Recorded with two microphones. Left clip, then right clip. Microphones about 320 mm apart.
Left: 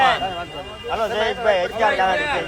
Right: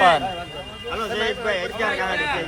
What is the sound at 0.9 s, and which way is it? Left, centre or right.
Speech, left.